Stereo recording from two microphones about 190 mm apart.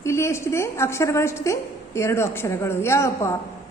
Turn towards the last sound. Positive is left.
turn(degrees=15)  # may be behind; listen again after turning